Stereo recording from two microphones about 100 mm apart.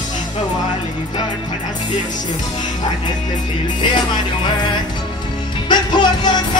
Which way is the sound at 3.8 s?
50° left (ahead or behind).